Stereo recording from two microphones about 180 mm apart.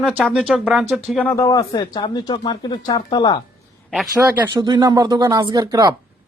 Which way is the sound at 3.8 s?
Centre (ahead or behind).